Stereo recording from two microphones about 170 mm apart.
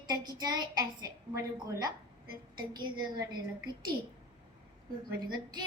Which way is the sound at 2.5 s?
25° right (ahead or behind).